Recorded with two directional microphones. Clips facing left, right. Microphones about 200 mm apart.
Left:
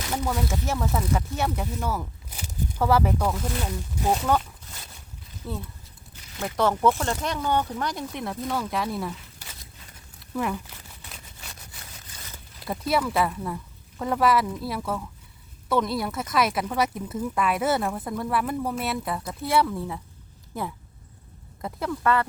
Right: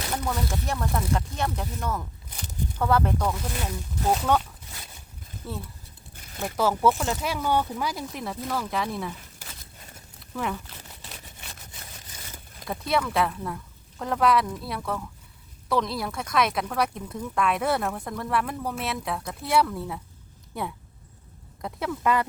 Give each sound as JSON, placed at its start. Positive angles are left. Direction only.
{"t": 0.1, "sound": "speech", "side_deg": 5}
{"t": 5.4, "sound": "speech", "side_deg": 0}
{"t": 10.3, "sound": "speech", "side_deg": 0}
{"t": 12.6, "sound": "speech", "side_deg": 0}
{"t": 22.0, "sound": "speech", "side_deg": -15}